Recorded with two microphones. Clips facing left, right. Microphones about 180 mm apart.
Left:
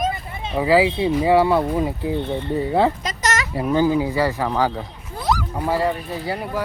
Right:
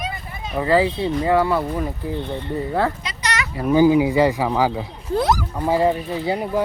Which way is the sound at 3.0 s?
45° left (ahead or behind).